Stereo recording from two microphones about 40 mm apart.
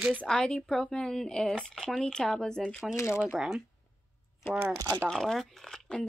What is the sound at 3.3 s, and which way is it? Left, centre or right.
Speech, centre.